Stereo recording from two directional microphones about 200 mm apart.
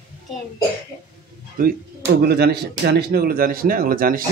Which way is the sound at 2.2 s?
55° right (ahead or behind).